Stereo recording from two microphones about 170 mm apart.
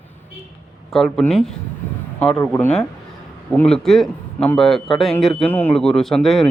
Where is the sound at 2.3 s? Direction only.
15° left (ahead or behind).